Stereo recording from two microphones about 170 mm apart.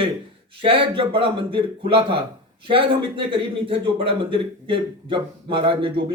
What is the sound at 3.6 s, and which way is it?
A man's voice, 30° right (ahead or behind).